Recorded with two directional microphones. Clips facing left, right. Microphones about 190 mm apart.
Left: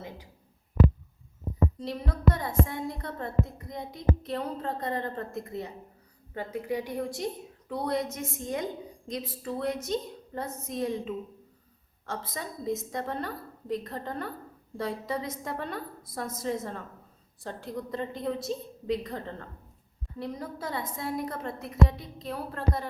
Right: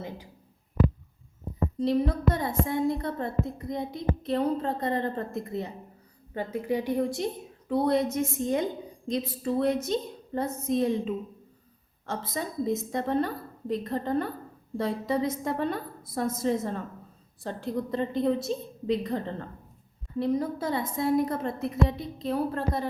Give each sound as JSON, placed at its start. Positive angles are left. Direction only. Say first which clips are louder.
{"t": 1.8, "sound": "a woman's voice", "louder": "right 9 dB", "side_deg": -25}